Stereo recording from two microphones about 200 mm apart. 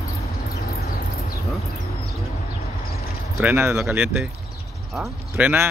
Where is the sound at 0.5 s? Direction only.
50° left (ahead or behind).